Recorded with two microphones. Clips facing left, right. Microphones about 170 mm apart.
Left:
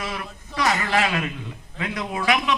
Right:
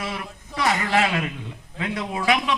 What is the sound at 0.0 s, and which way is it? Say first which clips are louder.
A man's voice: even; 25° right (ahead or behind).